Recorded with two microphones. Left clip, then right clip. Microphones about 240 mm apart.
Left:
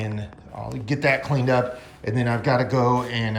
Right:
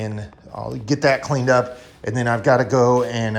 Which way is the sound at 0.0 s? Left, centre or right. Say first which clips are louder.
Right 3 dB; right.